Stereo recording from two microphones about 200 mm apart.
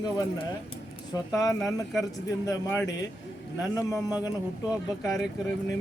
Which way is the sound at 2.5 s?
15° left (ahead or behind).